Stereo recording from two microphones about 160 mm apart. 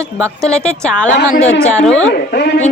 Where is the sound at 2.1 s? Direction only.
85° left.